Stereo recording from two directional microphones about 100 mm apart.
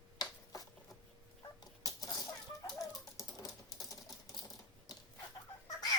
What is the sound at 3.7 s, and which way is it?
Typing, 35° left (ahead or behind).